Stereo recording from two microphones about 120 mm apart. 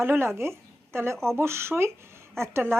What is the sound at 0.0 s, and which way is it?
Speech, 20° right (ahead or behind).